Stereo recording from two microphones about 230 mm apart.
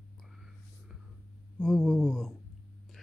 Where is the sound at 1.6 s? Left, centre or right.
Centre.